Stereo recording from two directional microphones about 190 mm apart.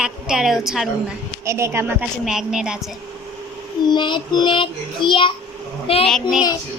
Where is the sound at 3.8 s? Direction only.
25° left (ahead or behind).